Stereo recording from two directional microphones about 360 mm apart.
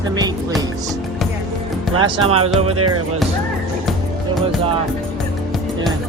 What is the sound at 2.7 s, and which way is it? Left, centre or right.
Speech, right.